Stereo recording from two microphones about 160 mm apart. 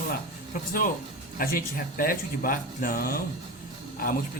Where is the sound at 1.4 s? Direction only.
60° left (ahead or behind).